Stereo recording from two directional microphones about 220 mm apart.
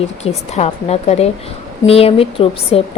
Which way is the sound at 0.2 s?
30° left (ahead or behind).